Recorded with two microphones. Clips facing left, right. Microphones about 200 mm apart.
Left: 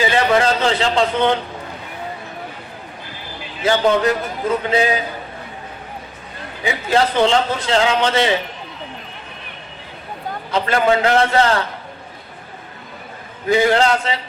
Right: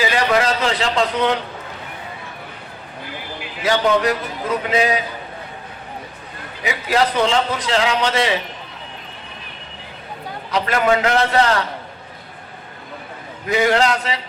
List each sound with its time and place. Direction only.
0.0 s a man's voice: 30° left (ahead or behind)
3.6 s a man's voice: 30° left (ahead or behind)
6.7 s a man's voice: 30° left (ahead or behind)
10.5 s a man's voice: 30° left (ahead or behind)
13.5 s a man's voice: 30° left (ahead or behind)